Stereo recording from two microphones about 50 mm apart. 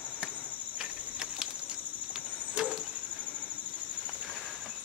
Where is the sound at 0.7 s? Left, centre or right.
Centre.